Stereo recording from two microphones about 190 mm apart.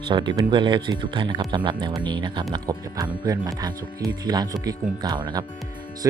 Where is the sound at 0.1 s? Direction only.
25° right (ahead or behind).